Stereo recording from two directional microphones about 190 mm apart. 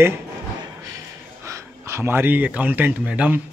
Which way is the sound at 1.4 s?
15° right (ahead or behind).